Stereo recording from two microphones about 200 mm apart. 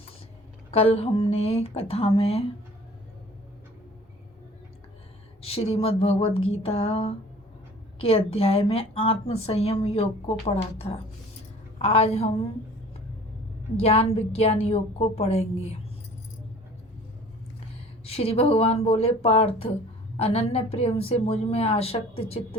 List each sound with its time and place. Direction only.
0.7 s a woman's voice: 30° left (ahead or behind)
5.4 s a woman's voice: 30° left (ahead or behind)
13.7 s a woman's voice: 30° left (ahead or behind)
18.0 s a woman's voice: 30° left (ahead or behind)